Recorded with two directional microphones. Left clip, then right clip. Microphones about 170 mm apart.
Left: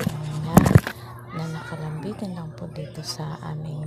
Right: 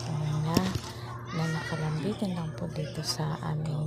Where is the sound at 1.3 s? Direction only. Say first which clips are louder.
Even; centre (ahead or behind).